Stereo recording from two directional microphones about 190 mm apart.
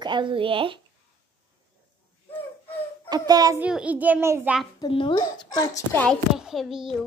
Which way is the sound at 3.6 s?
5° right (ahead or behind).